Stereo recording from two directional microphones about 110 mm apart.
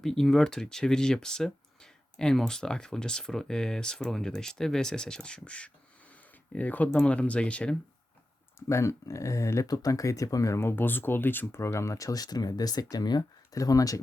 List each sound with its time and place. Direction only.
0.0 s speech: 5° left (ahead or behind)
8.5 s speech: 25° left (ahead or behind)